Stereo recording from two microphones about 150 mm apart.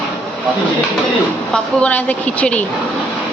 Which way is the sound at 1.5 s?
10° left (ahead or behind).